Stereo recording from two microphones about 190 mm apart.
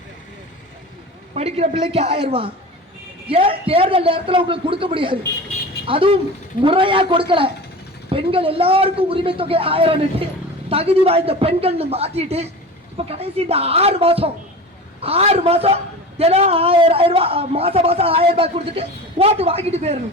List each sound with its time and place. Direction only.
1.4 s a man's voice: 35° right (ahead or behind)